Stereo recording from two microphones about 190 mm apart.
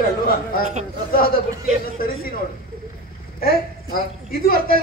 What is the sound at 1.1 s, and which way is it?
Speech, 50° left (ahead or behind).